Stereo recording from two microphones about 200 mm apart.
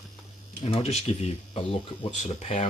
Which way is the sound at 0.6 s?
30° left (ahead or behind).